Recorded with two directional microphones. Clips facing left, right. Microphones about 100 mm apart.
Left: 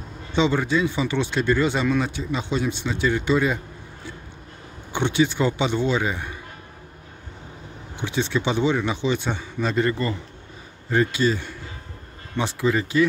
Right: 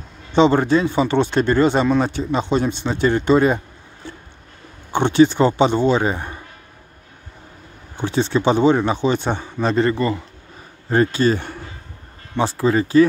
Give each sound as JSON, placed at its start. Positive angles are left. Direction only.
{"t": 0.4, "sound": "speech", "side_deg": -45}
{"t": 1.9, "sound": "speech", "side_deg": -35}
{"t": 4.9, "sound": "speech", "side_deg": -45}
{"t": 8.0, "sound": "speech", "side_deg": -40}
{"t": 12.4, "sound": "speech", "side_deg": -35}